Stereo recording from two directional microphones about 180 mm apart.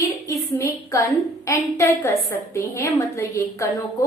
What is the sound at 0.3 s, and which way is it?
A woman's voice, 15° left (ahead or behind).